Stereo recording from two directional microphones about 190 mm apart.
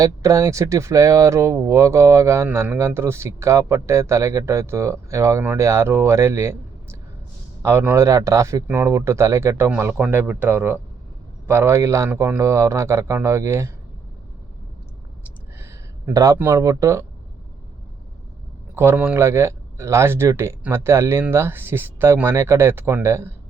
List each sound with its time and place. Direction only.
0.0 s speech: 15° right (ahead or behind)
7.6 s speech: 10° right (ahead or behind)
15.5 s speech: 15° right (ahead or behind)
18.7 s speech: 10° right (ahead or behind)